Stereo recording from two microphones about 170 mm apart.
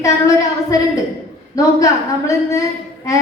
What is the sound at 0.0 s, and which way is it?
A woman's voice, 20° left (ahead or behind).